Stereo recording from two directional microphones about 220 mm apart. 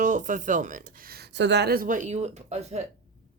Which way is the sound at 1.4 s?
50° right (ahead or behind).